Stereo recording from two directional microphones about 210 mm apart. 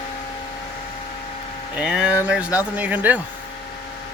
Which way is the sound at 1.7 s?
5° right (ahead or behind).